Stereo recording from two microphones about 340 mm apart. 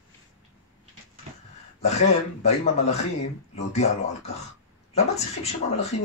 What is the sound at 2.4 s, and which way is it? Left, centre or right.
Speech, centre.